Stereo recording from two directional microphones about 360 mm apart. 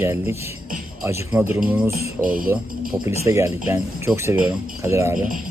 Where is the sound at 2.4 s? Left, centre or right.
Right.